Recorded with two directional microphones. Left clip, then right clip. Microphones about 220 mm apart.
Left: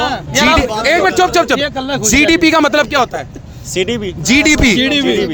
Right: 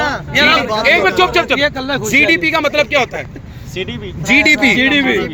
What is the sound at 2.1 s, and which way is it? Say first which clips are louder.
Speech: left 2 dB; 60° left (ahead or behind).